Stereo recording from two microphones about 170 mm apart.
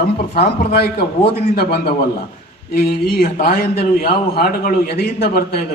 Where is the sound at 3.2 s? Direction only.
65° left (ahead or behind).